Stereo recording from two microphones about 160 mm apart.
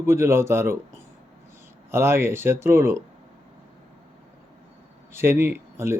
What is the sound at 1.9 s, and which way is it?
Speech, 15° right (ahead or behind).